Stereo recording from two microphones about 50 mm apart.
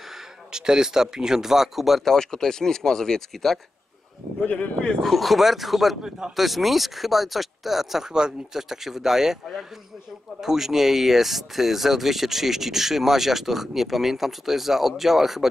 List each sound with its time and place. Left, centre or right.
0.5 s speech: centre
4.4 s speech: left
5.0 s speech: centre
6.0 s speech: centre
6.3 s speech: centre